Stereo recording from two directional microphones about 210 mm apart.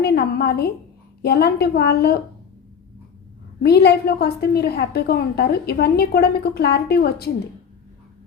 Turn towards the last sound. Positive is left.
turn(degrees=50)  # may be behind; listen again after turning